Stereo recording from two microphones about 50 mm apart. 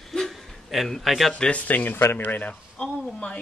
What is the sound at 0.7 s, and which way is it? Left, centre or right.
Speech, centre.